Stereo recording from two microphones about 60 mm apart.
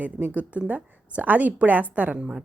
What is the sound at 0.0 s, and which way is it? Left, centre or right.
Speech, right.